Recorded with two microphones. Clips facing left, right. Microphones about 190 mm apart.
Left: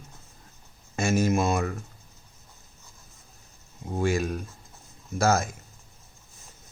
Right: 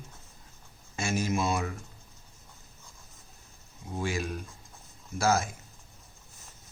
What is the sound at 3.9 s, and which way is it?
Speech, 45° left (ahead or behind).